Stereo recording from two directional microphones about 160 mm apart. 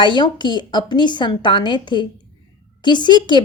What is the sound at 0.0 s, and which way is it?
A woman's voice, 30° left (ahead or behind).